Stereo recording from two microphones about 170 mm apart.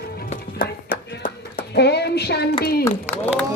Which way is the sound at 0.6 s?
55° left (ahead or behind).